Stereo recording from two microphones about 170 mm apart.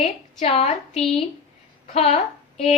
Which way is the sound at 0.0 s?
35° left (ahead or behind).